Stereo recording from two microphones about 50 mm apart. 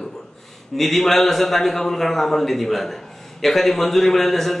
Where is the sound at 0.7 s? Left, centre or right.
Centre.